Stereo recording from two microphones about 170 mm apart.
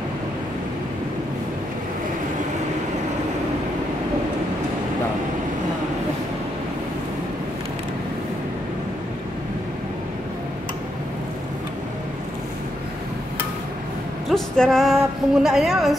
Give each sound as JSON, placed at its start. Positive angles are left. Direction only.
{"t": 14.3, "sound": "a woman's voice", "side_deg": 0}